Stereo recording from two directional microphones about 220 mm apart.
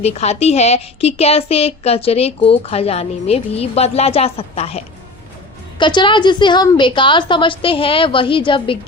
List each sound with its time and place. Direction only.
0.0 s a woman's voice: 30° left (ahead or behind)
5.8 s a woman's voice: 20° left (ahead or behind)